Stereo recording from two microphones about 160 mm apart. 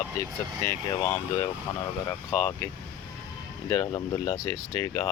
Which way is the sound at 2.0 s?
15° left (ahead or behind).